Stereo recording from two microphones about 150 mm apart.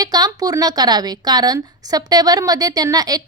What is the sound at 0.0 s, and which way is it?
A woman's voice, 25° right (ahead or behind).